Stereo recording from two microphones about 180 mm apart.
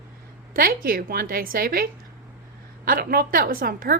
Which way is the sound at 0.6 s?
55° right (ahead or behind).